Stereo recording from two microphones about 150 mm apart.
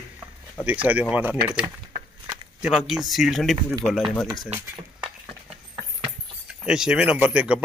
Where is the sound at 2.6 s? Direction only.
Centre (ahead or behind).